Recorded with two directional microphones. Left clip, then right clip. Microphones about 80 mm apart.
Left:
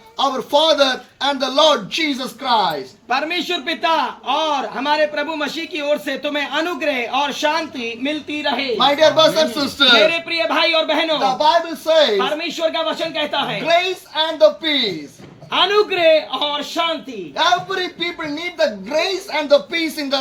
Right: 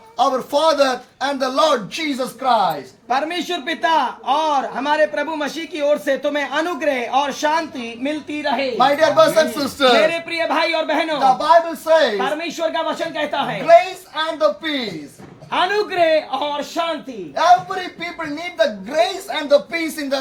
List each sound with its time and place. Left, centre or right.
0.2 s a man's voice: right
3.1 s a man's voice: centre
8.8 s a man's voice: right
10.0 s speech: centre
11.2 s a man's voice: right
12.2 s a man's voice: centre
13.7 s a man's voice: right
15.4 s a man's voice: centre
17.3 s a man's voice: right